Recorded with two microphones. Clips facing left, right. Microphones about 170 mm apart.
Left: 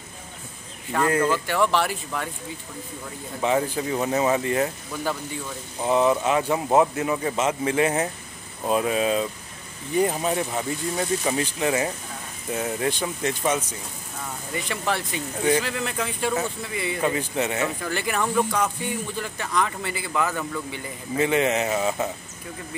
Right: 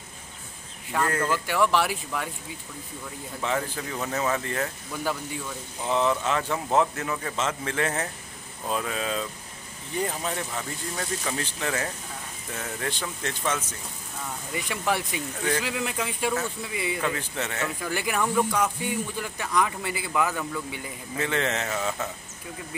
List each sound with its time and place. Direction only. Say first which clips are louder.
1.0 s speech: left 5 dB; 15° left (ahead or behind)
1.5 s speech: left 1 dB; 5° right (ahead or behind)
3.3 s speech: left 6 dB; 15° left (ahead or behind)
5.9 s speech: left 4 dB; 15° left (ahead or behind)
14.5 s speech: left 1 dB; 10° right (ahead or behind)
17.0 s speech: left 5 dB; 15° left (ahead or behind)
17.8 s speech: left 1 dB; 10° right (ahead or behind)
21.2 s speech: left 6 dB; 15° left (ahead or behind)